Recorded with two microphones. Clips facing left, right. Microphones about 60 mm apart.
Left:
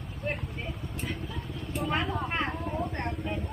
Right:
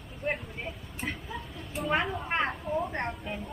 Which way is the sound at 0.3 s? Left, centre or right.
Centre.